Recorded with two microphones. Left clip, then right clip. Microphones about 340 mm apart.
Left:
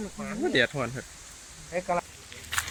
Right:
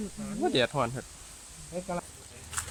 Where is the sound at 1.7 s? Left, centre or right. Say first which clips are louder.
Left 7 dB; left.